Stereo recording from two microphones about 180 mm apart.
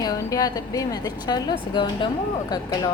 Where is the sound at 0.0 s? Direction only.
20° left (ahead or behind).